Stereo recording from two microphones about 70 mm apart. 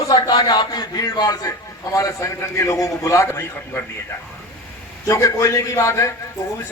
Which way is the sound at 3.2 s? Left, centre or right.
Left.